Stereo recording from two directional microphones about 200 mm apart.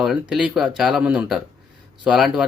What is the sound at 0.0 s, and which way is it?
Speech, 5° right (ahead or behind).